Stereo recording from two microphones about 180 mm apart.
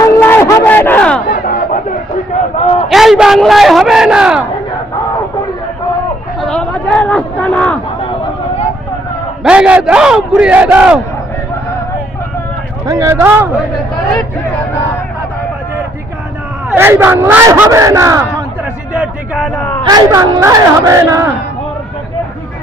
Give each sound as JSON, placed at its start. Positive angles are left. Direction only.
{"t": 0.2, "sound": "crowd", "side_deg": 15}
{"t": 1.3, "sound": "a sound", "side_deg": 55}
{"t": 2.9, "sound": "a sound", "side_deg": 0}
{"t": 6.4, "sound": "a sound", "side_deg": 5}
{"t": 9.4, "sound": "speech", "side_deg": -5}
{"t": 12.8, "sound": "speech", "side_deg": -15}
{"t": 16.6, "sound": "speech", "side_deg": -15}
{"t": 18.9, "sound": "speech", "side_deg": 0}
{"t": 19.9, "sound": "speech", "side_deg": -20}